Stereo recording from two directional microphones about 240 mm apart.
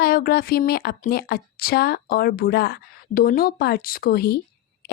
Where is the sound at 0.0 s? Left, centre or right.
Left.